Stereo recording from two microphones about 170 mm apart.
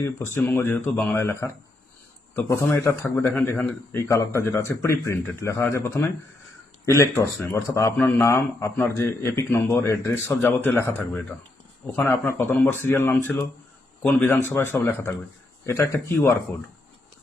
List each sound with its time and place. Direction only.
0.0 s a man's voice: 15° left (ahead or behind)